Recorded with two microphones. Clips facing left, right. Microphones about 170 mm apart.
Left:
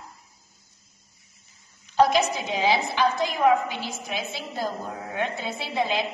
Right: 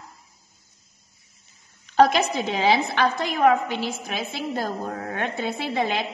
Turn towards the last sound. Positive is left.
turn(degrees=-55)  # may be behind; listen again after turning